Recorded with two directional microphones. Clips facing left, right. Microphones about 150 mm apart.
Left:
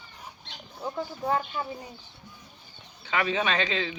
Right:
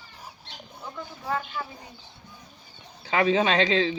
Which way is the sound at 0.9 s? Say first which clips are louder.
Left 3 dB; 30° left (ahead or behind).